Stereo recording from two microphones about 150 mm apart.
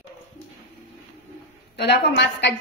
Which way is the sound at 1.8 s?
90° left.